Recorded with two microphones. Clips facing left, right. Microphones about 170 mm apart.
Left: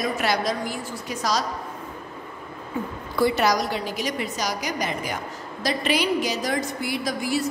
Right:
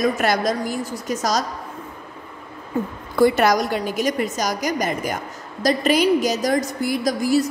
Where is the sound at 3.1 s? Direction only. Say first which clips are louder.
Right 5 dB; 50° right (ahead or behind).